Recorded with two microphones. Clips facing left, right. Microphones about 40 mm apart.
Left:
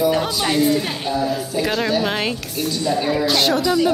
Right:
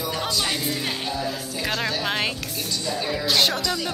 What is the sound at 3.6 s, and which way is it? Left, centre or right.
Speech, centre.